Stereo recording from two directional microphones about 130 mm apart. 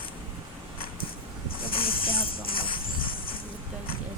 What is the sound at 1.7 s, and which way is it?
Speech, 45° left (ahead or behind).